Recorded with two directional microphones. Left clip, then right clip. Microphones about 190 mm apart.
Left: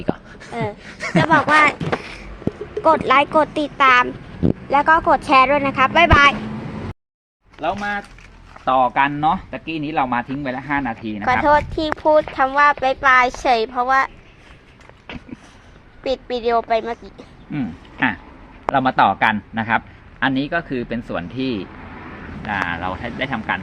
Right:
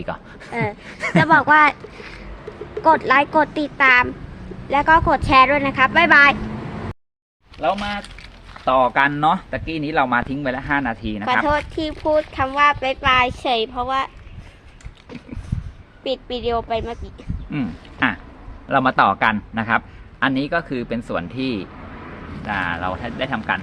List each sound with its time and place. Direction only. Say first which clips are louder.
0.0 s a sound: left 3 dB; 20° right (ahead or behind)
0.5 s speech: right 1 dB; 10° right (ahead or behind)
0.9 s speech: even; 25° right (ahead or behind)
1.2 s a man's voice: right 1 dB; 5° right (ahead or behind)
2.8 s a man's voice: even; centre (ahead or behind)
7.6 s speech: right 1 dB; 10° right (ahead or behind)
11.4 s a man's voice: left 5 dB; centre (ahead or behind)
16.4 s speech: left 5 dB; 10° left (ahead or behind)
17.5 s a sound: even; centre (ahead or behind)
18.7 s a man's voice: even; centre (ahead or behind)